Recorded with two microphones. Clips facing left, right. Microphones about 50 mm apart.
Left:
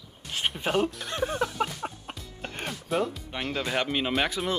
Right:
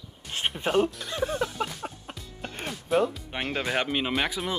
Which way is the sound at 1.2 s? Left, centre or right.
Centre.